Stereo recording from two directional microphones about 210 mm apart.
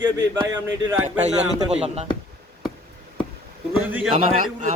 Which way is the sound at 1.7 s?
30° right (ahead or behind).